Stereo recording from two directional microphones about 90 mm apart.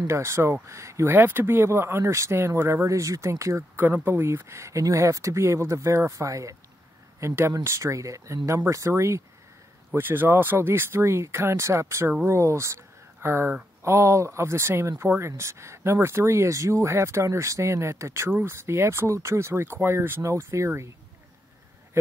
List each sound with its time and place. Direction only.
0.0 s speech: 30° right (ahead or behind)